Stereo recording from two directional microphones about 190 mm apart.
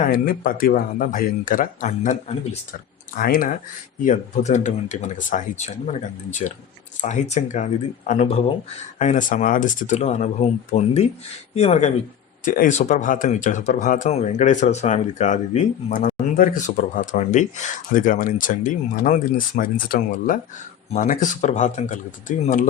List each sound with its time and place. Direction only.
0.0 s speech: 50° left (ahead or behind)
3.2 s speech: 50° left (ahead or behind)